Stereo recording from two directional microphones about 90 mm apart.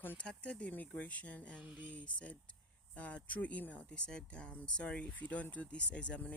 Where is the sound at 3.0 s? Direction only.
15° left (ahead or behind).